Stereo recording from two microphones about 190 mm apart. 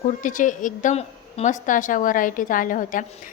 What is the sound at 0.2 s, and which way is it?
A woman's voice, 45° left (ahead or behind).